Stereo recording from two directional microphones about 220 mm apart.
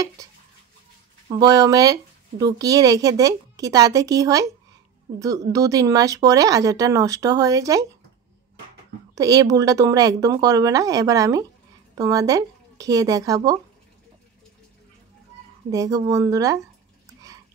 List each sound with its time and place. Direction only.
1.3 s speech: 20° right (ahead or behind)
5.5 s speech: 15° right (ahead or behind)
9.1 s speech: 15° right (ahead or behind)
15.7 s speech: 15° right (ahead or behind)